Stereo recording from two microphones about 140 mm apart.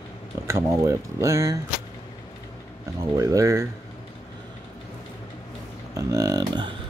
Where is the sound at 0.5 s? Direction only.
20° right (ahead or behind).